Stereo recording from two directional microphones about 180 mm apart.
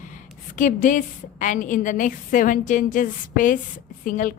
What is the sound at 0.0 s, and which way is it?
A woman's voice, 45° left (ahead or behind).